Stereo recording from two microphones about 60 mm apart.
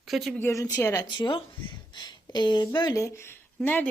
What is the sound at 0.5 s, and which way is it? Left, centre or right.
Speech, left.